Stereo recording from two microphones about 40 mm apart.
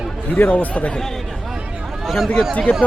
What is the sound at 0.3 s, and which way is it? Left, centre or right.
Speech, left.